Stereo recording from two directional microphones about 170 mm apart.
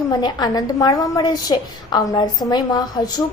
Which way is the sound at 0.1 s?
25° left (ahead or behind).